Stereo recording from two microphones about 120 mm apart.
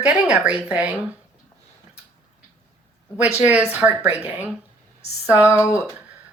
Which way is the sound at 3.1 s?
15° right (ahead or behind).